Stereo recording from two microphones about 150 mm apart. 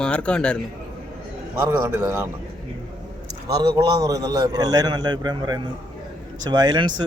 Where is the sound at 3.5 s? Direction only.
25° right (ahead or behind).